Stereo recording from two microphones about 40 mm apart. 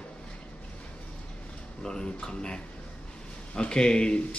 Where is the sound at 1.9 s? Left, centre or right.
Centre.